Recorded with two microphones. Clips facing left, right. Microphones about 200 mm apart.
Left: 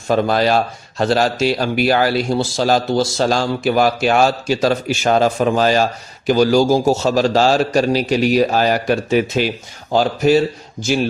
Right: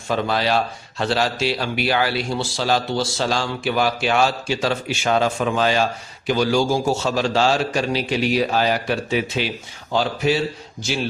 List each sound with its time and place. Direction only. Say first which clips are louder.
0.1 s speech: left 5 dB; 45° left (ahead or behind)